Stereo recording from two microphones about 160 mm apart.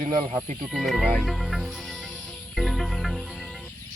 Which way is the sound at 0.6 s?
Centre (ahead or behind).